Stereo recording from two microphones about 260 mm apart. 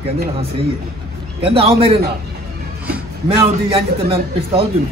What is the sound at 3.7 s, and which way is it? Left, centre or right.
Speech, right.